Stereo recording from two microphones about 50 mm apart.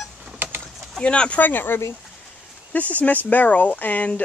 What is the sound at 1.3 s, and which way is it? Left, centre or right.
Speech, left.